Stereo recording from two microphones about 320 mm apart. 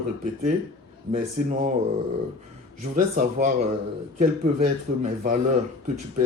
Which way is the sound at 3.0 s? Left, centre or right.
Right.